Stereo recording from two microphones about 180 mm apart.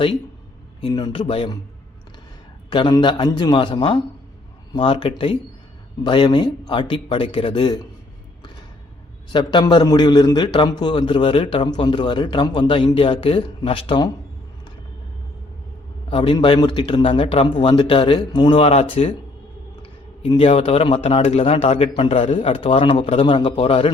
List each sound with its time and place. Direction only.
0.8 s a man's voice: 20° left (ahead or behind)
2.6 s a man's voice: 25° left (ahead or behind)
9.3 s a man's voice: 25° left (ahead or behind)
16.0 s a man's voice: 30° left (ahead or behind)
20.2 s a man's voice: 30° left (ahead or behind)